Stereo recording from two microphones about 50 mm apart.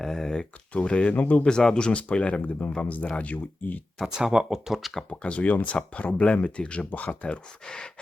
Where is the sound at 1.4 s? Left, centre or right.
Centre.